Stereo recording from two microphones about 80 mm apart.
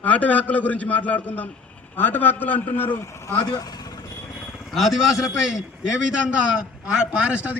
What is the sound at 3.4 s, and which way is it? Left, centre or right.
Speech, left.